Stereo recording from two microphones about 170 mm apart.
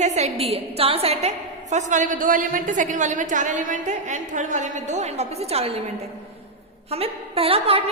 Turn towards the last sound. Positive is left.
turn(degrees=-35)  # may be behind; listen again after turning